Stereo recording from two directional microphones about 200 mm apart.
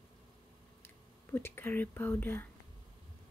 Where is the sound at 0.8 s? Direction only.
10° left (ahead or behind).